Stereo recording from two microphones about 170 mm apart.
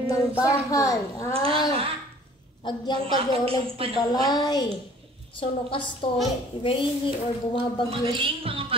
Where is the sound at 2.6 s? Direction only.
25° left (ahead or behind).